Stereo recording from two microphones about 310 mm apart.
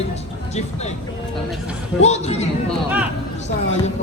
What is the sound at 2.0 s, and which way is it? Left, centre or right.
Speech, left.